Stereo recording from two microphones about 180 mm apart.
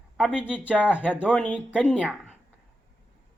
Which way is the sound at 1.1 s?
5° right (ahead or behind).